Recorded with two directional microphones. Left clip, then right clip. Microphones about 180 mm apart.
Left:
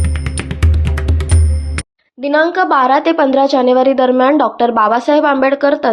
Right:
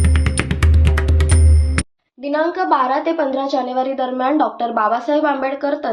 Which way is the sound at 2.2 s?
60° left (ahead or behind).